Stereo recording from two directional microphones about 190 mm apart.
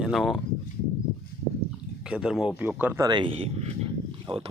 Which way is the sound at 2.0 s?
5° right (ahead or behind).